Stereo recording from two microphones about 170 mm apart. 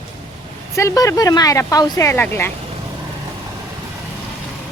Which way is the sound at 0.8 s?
20° left (ahead or behind).